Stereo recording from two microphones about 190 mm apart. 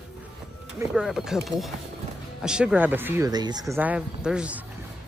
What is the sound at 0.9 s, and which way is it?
Speech, centre (ahead or behind).